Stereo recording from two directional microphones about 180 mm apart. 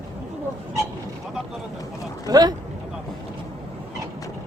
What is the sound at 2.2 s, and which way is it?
Speech, 20° right (ahead or behind).